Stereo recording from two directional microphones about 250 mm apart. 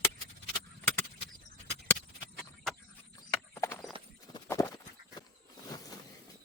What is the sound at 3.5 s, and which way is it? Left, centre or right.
Clip-clop, centre.